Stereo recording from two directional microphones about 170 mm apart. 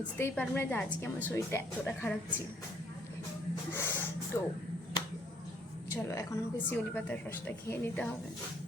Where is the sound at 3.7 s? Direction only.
15° left (ahead or behind).